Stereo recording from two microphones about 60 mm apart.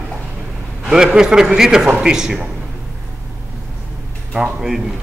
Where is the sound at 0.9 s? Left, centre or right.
Centre.